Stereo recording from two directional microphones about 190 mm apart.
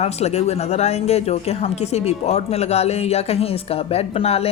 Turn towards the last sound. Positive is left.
turn(degrees=30)  # may be behind; listen again after turning